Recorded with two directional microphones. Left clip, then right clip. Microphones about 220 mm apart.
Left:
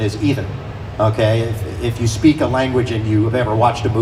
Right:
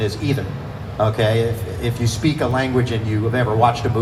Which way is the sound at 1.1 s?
50° left (ahead or behind).